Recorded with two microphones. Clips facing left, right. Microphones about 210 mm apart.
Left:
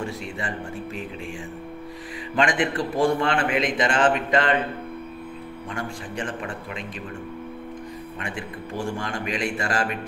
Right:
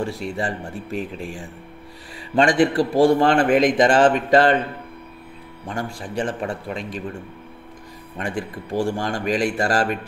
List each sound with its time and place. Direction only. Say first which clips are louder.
0.0 s a man's voice: right 5 dB; 35° right (ahead or behind)
2.3 s a man's voice: right 6 dB; 35° right (ahead or behind)
5.7 s a man's voice: right 4 dB; 40° right (ahead or behind)
8.2 s a man's voice: right 8 dB; 40° right (ahead or behind)